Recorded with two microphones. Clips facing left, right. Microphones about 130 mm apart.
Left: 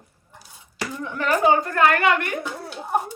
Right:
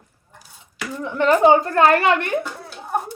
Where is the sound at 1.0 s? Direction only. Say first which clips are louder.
Right 5 dB; 25° right (ahead or behind).